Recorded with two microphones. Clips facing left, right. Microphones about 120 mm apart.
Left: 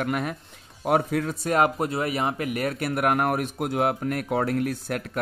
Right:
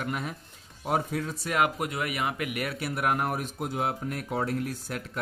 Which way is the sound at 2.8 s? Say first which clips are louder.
Left 4 dB; 60° left (ahead or behind).